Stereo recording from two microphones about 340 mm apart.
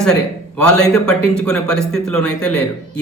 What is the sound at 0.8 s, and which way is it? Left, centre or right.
Speech, centre.